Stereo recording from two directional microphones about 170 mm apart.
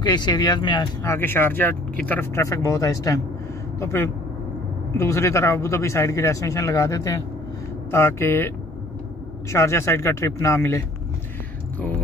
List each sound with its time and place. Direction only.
0.0 s speech: 25° left (ahead or behind)